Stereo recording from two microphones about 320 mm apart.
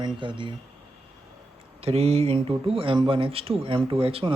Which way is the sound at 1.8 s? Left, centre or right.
Centre.